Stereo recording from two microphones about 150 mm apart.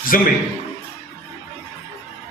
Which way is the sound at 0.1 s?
65° left (ahead or behind).